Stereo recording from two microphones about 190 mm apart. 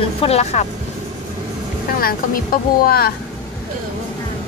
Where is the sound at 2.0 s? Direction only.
50° left (ahead or behind).